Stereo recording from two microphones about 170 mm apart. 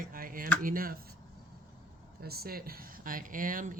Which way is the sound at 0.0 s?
55° right (ahead or behind).